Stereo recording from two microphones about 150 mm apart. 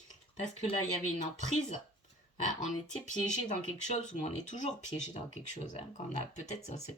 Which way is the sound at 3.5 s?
50° left (ahead or behind).